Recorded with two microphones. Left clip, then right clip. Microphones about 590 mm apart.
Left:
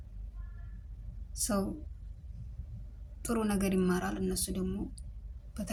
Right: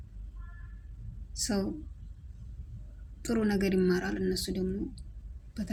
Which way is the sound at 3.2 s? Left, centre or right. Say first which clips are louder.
Right 3 dB; left.